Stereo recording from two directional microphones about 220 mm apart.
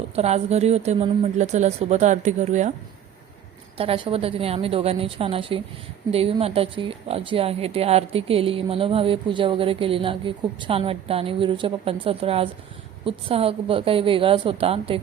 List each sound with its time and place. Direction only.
0.2 s a woman's voice: 30° right (ahead or behind)
3.8 s a woman's voice: 25° right (ahead or behind)